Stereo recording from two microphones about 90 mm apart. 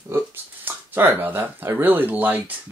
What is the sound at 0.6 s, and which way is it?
Speech, 25° right (ahead or behind).